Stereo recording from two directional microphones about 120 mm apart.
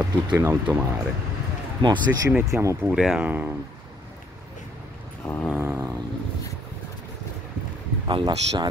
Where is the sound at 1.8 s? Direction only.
40° right (ahead or behind).